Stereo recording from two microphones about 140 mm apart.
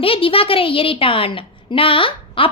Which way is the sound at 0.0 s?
40° left (ahead or behind).